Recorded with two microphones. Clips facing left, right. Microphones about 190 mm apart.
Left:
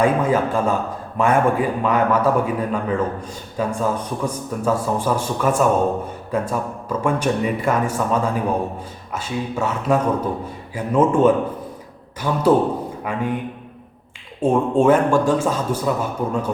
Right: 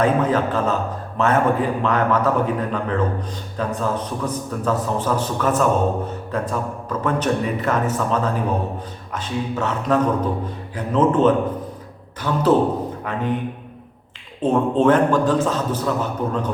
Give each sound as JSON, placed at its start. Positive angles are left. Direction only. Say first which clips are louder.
{"t": 0.0, "sound": "a man's voice", "louder": "left 1 dB", "side_deg": 10}
{"t": 14.4, "sound": "a man's voice", "louder": "left 1 dB", "side_deg": 10}